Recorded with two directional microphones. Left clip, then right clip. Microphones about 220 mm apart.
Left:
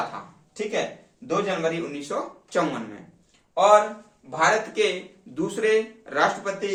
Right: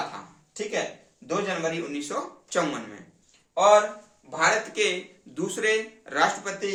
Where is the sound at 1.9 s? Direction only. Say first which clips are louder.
Left 2 dB; 20° right (ahead or behind).